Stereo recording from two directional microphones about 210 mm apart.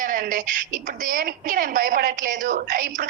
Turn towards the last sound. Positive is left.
turn(degrees=-40)  # may be behind; listen again after turning